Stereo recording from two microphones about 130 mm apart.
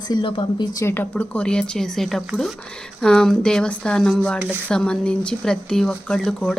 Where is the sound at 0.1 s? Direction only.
35° left (ahead or behind).